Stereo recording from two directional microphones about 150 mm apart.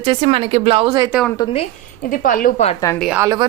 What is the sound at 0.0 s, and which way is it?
Speech, 40° right (ahead or behind).